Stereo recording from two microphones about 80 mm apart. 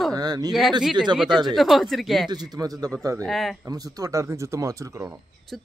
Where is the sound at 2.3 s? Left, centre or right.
Right.